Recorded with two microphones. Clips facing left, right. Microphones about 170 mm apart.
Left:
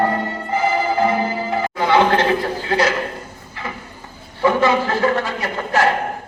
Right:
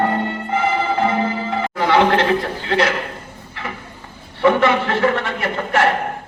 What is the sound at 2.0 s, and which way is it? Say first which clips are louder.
Speech: even; 25° right (ahead or behind).